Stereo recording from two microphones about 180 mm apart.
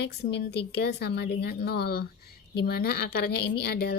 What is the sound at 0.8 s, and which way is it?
Speech, 65° left (ahead or behind).